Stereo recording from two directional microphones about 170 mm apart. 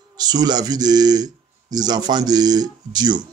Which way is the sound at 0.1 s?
25° right (ahead or behind).